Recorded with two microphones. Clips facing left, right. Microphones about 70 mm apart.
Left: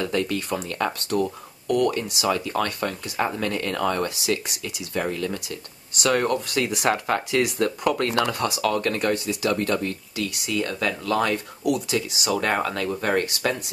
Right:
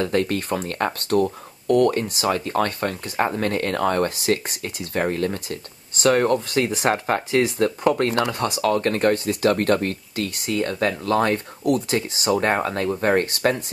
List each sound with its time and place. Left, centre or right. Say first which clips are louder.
0.0 s speech: right 3 dB; right